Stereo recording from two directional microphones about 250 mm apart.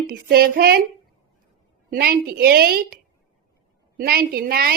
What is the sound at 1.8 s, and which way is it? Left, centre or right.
A woman's voice, right.